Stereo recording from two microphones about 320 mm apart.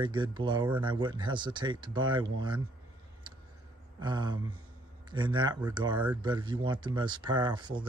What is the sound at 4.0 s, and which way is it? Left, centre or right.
Speech, centre.